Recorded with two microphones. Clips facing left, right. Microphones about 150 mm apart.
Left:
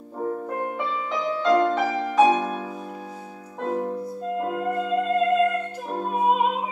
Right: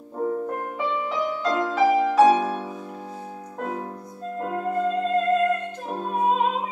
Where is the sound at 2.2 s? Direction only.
15° left (ahead or behind).